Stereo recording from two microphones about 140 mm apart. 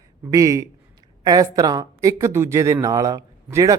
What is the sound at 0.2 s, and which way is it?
A man's voice, 25° right (ahead or behind).